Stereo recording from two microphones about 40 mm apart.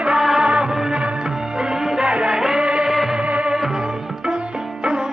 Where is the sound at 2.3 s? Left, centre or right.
Centre.